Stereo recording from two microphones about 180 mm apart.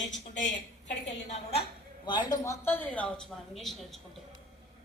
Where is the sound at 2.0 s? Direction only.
25° left (ahead or behind); by 4.0 s centre (ahead or behind).